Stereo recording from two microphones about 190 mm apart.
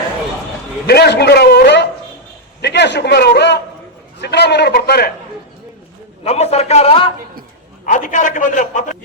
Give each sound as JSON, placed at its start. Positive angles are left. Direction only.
{"t": 0.9, "sound": "a man's voice", "side_deg": 60}
{"t": 6.2, "sound": "a man's voice", "side_deg": 35}
{"t": 7.9, "sound": "a man's voice", "side_deg": 40}